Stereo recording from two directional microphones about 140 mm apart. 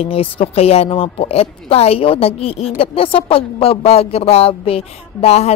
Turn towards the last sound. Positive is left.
turn(degrees=50)  # may be behind; listen again after turning